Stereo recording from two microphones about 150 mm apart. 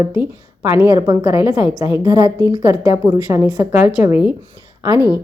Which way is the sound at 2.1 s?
30° right (ahead or behind).